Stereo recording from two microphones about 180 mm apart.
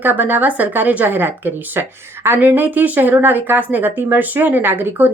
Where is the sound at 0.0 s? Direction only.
10° right (ahead or behind).